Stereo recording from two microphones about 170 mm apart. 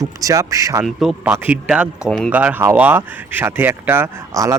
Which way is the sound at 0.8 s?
Centre (ahead or behind).